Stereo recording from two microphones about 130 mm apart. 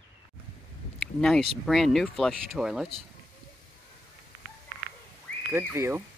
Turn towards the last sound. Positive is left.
turn(degrees=-20)  # may be behind; listen again after turning